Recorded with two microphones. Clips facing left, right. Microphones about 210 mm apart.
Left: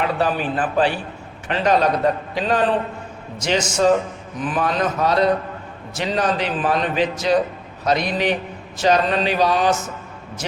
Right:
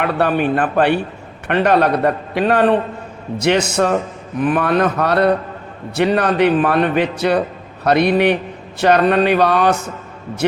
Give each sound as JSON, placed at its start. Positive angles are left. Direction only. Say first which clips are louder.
{"t": 0.0, "sound": "a man's voice", "louder": "right 4 dB", "side_deg": -60}